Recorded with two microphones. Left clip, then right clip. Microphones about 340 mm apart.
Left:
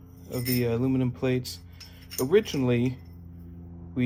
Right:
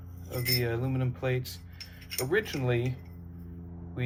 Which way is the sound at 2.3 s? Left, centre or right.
Left.